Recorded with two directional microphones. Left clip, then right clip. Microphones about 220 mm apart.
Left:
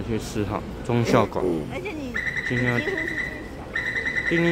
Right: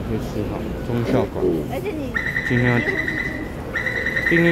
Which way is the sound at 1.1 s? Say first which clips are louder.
Left 1 dB; 30° left (ahead or behind).